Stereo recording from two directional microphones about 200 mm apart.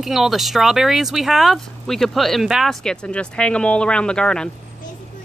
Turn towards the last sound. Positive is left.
turn(degrees=5)  # may be behind; listen again after turning